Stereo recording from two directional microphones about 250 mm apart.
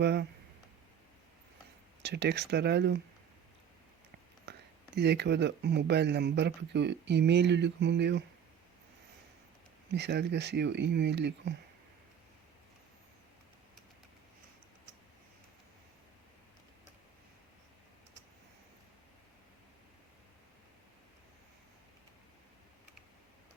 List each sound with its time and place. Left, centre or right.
0.0 s speech: right
2.0 s speech: right
4.5 s a sound: right
4.9 s speech: right
9.9 s speech: right